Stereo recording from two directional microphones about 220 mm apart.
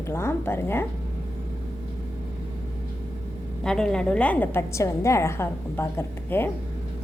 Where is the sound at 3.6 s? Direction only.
5° left (ahead or behind).